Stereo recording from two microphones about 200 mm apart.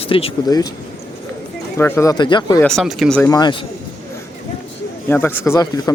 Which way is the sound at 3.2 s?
20° left (ahead or behind).